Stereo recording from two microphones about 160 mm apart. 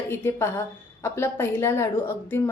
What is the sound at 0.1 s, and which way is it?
A woman's voice, 15° left (ahead or behind).